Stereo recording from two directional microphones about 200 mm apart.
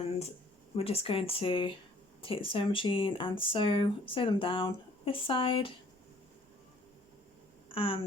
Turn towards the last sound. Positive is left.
turn(degrees=25)  # may be behind; listen again after turning